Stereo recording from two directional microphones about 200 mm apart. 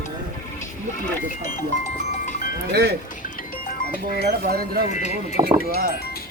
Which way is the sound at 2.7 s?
55° right (ahead or behind).